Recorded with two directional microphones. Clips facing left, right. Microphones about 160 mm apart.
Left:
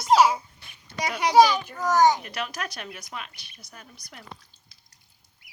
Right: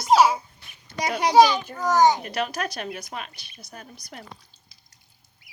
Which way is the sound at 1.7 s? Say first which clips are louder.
Right 1 dB; 15° right (ahead or behind).